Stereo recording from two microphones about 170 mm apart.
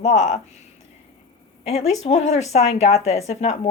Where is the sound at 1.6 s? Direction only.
35° left (ahead or behind).